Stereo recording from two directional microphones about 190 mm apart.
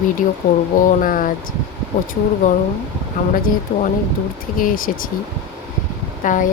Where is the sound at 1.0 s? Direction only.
45° left (ahead or behind).